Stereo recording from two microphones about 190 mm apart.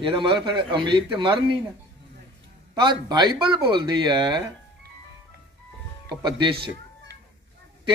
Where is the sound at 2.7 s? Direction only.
20° right (ahead or behind).